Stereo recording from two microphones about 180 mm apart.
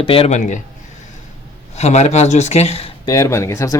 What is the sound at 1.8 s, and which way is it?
Speech, 35° left (ahead or behind).